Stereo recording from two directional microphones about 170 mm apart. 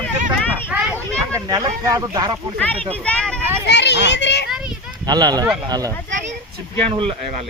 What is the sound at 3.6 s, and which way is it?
Speech, 90° left.